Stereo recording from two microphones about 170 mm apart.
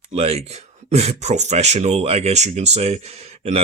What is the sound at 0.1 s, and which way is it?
Speech, 40° right (ahead or behind).